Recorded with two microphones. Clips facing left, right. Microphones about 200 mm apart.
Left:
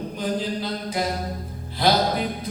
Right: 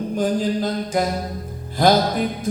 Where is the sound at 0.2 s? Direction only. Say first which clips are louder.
Right 6 dB; 45° right (ahead or behind).